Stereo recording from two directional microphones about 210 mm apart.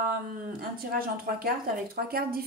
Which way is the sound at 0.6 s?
45° right (ahead or behind).